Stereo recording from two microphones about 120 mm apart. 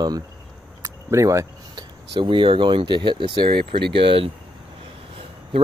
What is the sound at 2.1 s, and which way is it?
Speech, 45° right (ahead or behind).